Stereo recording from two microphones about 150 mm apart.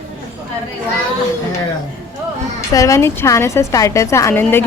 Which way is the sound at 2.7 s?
20° left (ahead or behind).